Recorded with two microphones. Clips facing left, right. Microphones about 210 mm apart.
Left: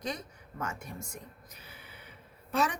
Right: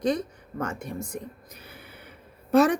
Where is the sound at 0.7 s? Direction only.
30° right (ahead or behind).